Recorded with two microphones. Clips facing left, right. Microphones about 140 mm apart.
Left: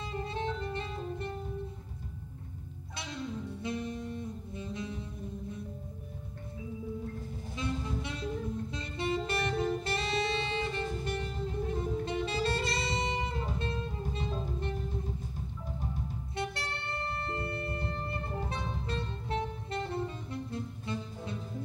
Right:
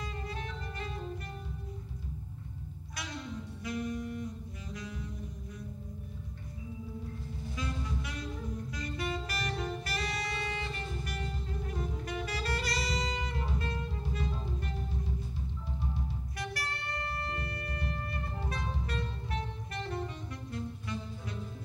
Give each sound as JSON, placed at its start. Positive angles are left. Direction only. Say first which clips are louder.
{"t": 0.1, "sound": "saxophone", "louder": "left 6 dB", "side_deg": 25}
{"t": 3.6, "sound": "music", "louder": "right 2 dB", "side_deg": 25}
{"t": 7.5, "sound": "music", "louder": "left 4 dB", "side_deg": 25}
{"t": 8.7, "sound": "saxophone", "louder": "left 3 dB", "side_deg": 25}
{"t": 16.3, "sound": "music", "louder": "left 3 dB", "side_deg": 25}